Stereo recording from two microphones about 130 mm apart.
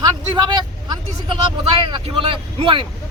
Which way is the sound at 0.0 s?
35° right (ahead or behind).